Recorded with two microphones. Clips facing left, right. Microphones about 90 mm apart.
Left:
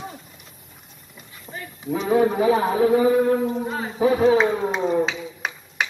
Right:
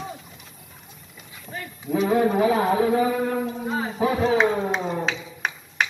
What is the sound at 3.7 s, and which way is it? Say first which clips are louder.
Speech: left 2 dB; centre (ahead or behind).